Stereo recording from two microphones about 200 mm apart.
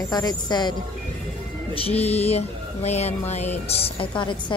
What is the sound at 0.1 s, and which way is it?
Speech, 20° left (ahead or behind).